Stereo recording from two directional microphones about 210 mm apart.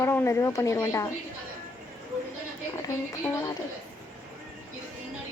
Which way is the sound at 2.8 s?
15° left (ahead or behind).